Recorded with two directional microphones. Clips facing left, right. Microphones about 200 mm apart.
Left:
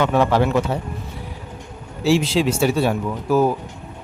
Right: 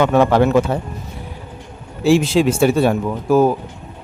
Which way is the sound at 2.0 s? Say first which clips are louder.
Right 4 dB; 50° right (ahead or behind).